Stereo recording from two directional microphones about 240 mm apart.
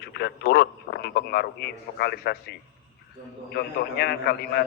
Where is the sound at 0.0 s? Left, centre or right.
Left.